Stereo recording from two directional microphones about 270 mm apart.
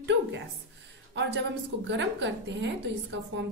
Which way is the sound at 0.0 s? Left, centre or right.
Right.